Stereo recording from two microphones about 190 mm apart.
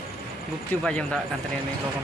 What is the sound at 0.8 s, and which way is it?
Speech, 5° left (ahead or behind).